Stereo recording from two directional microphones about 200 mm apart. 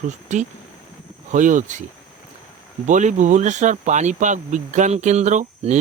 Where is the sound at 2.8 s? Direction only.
40° right (ahead or behind).